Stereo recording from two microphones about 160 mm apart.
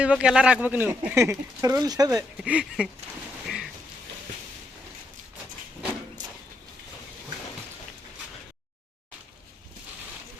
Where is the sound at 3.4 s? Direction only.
Centre (ahead or behind).